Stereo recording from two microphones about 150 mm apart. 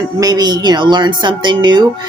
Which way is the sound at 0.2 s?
25° right (ahead or behind).